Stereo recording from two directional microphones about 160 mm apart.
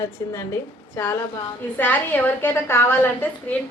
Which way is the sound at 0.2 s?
20° left (ahead or behind).